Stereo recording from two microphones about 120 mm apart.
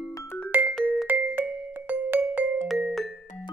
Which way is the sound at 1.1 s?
15° right (ahead or behind).